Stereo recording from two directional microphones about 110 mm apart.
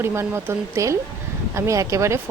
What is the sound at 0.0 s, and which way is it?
Speech, 25° right (ahead or behind).